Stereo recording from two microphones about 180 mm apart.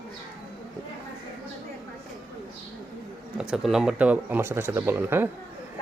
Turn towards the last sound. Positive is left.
turn(degrees=-10)  # may be behind; listen again after turning